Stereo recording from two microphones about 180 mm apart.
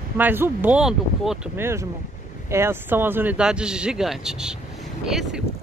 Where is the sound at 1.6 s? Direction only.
15° right (ahead or behind).